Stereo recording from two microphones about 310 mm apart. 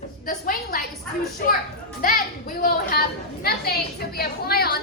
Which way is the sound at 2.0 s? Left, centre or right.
Left.